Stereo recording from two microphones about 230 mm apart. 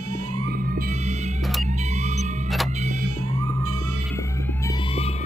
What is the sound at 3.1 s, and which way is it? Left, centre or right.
Music, right.